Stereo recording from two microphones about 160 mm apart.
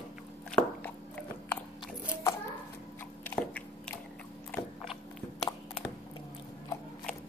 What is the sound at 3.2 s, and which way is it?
Biting, 10° left (ahead or behind).